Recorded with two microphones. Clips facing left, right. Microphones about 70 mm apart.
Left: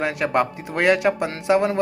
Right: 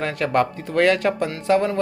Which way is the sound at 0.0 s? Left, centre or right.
Centre.